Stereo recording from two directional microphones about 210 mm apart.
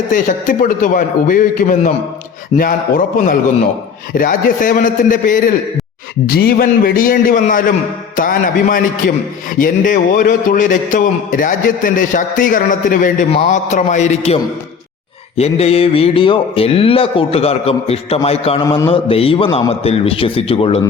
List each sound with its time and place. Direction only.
0.1 s a man's voice: 40° left (ahead or behind)
4.1 s a man's voice: 40° left (ahead or behind)
15.4 s speech: 30° left (ahead or behind)